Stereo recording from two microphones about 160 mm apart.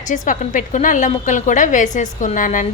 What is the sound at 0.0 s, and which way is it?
A woman's voice, 55° left (ahead or behind).